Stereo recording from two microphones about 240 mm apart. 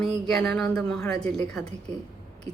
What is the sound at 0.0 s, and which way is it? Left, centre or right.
Speech, centre.